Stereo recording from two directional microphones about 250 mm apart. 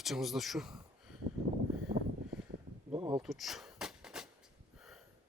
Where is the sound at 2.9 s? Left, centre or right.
Centre.